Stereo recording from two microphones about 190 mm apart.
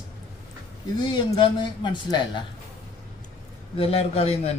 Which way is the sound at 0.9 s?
25° left (ahead or behind).